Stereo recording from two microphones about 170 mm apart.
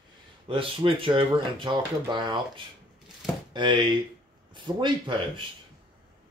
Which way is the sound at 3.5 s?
25° right (ahead or behind).